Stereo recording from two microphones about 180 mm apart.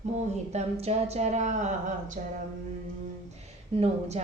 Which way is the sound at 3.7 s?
35° right (ahead or behind).